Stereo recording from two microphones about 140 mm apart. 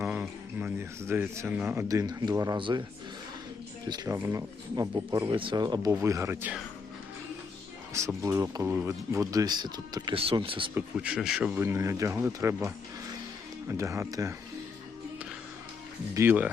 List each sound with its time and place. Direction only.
0.0 s speech: 15° right (ahead or behind)
2.6 s speech: 35° right (ahead or behind)
3.8 s speech: 30° right (ahead or behind)
5.3 s speech: 40° right (ahead or behind); by 6.5 s 20° right (ahead or behind)
7.9 s speech: 20° right (ahead or behind)
8.6 s speech: 10° right (ahead or behind)
8.9 s speech: 20° right (ahead or behind)
10.2 s speech: 40° right (ahead or behind)
10.8 s speech: 10° right (ahead or behind)
16.1 s speech: 15° right (ahead or behind)